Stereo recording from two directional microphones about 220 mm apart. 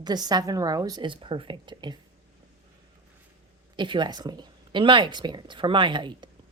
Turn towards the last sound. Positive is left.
turn(degrees=-20)  # may be behind; listen again after turning